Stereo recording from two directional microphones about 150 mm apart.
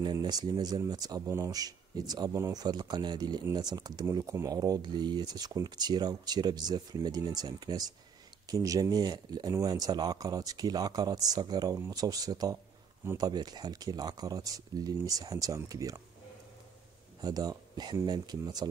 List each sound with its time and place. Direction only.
0.0 s speech: 25° right (ahead or behind)
13.3 s speech: 25° right (ahead or behind)
17.2 s speech: 25° right (ahead or behind)